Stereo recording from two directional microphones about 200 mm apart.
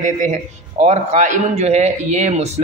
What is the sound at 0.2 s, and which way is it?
A man's voice, 35° right (ahead or behind).